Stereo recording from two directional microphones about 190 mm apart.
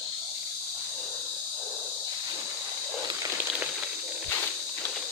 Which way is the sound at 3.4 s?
5° right (ahead or behind).